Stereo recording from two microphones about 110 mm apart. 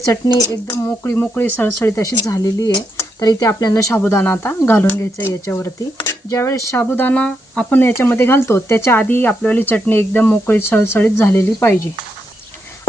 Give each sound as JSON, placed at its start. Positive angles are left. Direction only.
{"t": 0.1, "sound": "speech", "side_deg": 30}
{"t": 2.0, "sound": "speech", "side_deg": 30}
{"t": 4.1, "sound": "speech", "side_deg": 20}